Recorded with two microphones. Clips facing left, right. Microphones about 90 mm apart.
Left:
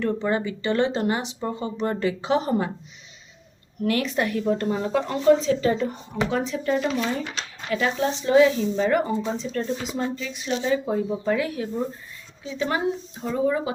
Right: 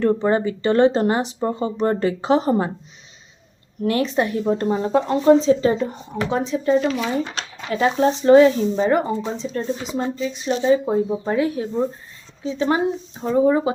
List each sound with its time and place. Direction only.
0.0 s speech: 35° right (ahead or behind)
3.8 s a woman's voice: 30° right (ahead or behind)
6.8 s speech: centre (ahead or behind)
7.7 s speech: 30° right (ahead or behind)
8.2 s speech: 45° right (ahead or behind)
8.7 s a woman's voice: 25° right (ahead or behind)